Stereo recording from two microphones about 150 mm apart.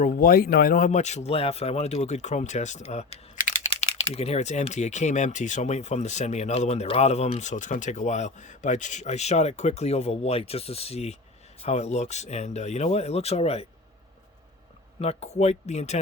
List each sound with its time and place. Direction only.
0.0 s speech: 70° left (ahead or behind)
0.9 s speech: 50° left (ahead or behind)
14.9 s speech: 45° left (ahead or behind)